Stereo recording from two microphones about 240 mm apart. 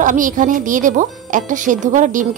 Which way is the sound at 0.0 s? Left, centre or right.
Right.